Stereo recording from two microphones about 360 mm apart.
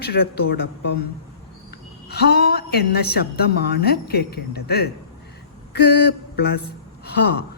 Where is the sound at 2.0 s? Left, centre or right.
Left.